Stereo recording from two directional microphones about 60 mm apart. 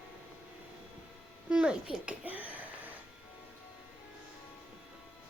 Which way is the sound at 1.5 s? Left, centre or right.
Centre.